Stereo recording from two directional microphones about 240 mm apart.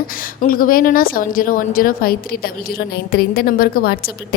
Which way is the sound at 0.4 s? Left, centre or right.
Left.